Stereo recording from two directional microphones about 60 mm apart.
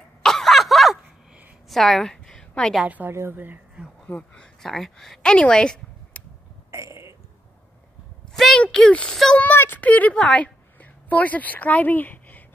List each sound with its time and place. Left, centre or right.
0.2 s cough: centre
1.7 s a sound: centre
3.1 s speech: right
3.8 s speech: centre
4.2 s a woman's voice: centre
6.2 s a sound: left
6.7 s burping: right
8.3 s a sound: centre
8.8 s a woman's voice: centre
9.4 s a woman's voice: left